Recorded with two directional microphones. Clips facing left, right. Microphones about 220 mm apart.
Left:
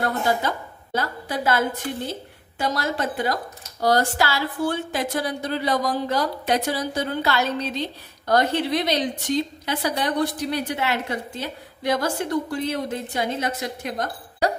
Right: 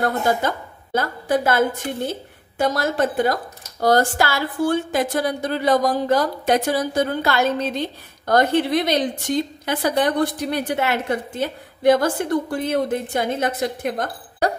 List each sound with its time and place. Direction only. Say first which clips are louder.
0.4 s a woman's voice: right 3 dB; 50° right (ahead or behind)